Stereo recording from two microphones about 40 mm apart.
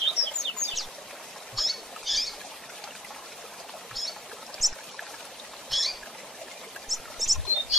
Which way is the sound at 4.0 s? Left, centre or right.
Centre.